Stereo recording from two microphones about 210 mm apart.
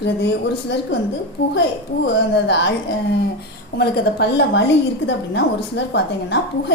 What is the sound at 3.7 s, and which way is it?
A woman's voice, 50° left (ahead or behind).